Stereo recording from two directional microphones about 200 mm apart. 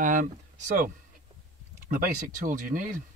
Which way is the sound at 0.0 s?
40° right (ahead or behind).